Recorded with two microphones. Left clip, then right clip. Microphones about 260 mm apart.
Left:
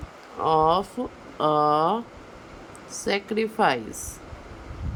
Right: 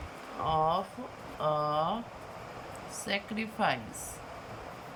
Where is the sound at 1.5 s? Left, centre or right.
Left.